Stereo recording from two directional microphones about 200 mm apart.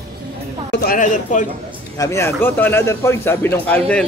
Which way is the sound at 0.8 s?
40° left (ahead or behind).